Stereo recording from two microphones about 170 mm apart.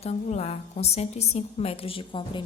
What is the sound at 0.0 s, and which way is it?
A woman's voice, 40° left (ahead or behind).